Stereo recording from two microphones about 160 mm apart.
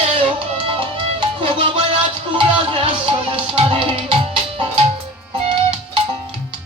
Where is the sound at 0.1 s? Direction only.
35° right (ahead or behind).